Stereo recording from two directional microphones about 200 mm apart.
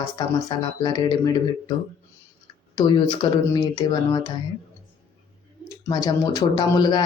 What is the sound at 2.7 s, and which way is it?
Speech, 20° left (ahead or behind).